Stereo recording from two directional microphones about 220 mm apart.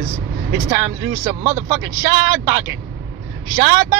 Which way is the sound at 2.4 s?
15° right (ahead or behind).